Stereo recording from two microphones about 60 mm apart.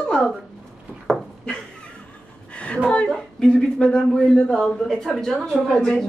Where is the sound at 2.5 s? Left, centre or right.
Left.